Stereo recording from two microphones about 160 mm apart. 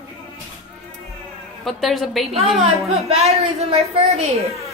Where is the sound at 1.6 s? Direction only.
Centre (ahead or behind).